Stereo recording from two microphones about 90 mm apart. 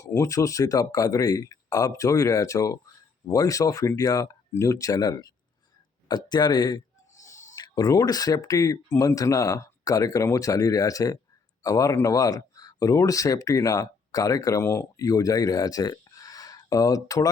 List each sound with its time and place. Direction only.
0.0 s speech: 35° left (ahead or behind); by 6.7 s 55° left (ahead or behind)
7.3 s owl: 35° left (ahead or behind)
7.6 s speech: 50° left (ahead or behind)